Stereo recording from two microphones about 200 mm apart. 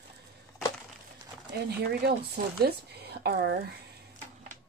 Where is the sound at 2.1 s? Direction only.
55° right (ahead or behind).